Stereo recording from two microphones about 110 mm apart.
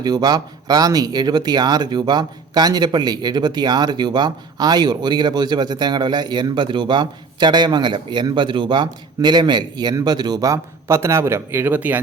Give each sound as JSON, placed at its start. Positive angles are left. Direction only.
{"t": 0.0, "sound": "speech", "side_deg": -40}